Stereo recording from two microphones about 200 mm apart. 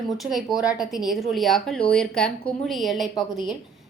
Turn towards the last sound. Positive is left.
turn(degrees=0)  # may be behind; listen again after turning